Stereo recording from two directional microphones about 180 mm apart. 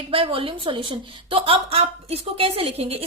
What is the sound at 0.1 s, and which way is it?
A woman's voice, 30° right (ahead or behind).